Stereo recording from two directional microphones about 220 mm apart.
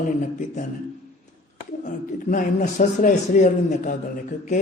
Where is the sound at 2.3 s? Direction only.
35° left (ahead or behind).